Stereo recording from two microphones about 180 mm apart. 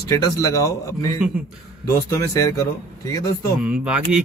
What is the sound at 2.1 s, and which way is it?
Speech, 15° left (ahead or behind).